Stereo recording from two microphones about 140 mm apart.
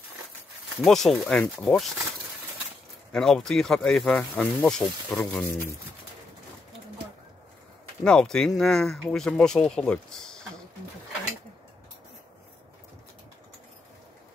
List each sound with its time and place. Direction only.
0.8 s speech: centre (ahead or behind)
3.1 s speech: 5° left (ahead or behind)
5.4 s speech: 15° left (ahead or behind)
8.0 s speech: 5° left (ahead or behind)